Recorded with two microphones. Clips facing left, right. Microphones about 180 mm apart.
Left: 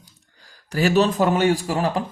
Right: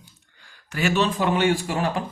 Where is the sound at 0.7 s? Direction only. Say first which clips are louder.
Left 4 dB; 35° left (ahead or behind).